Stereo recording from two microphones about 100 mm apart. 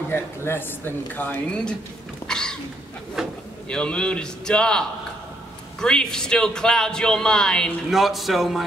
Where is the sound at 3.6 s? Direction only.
10° left (ahead or behind).